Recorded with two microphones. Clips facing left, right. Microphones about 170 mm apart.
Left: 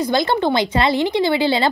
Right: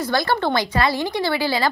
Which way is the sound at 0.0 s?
20° left (ahead or behind).